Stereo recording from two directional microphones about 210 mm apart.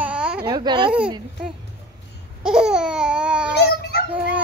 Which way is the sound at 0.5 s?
20° right (ahead or behind).